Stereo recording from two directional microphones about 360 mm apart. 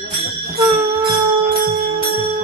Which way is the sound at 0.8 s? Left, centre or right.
Centre.